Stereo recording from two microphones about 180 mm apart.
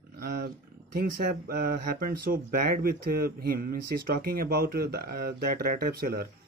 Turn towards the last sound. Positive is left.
turn(degrees=-60)  # may be behind; listen again after turning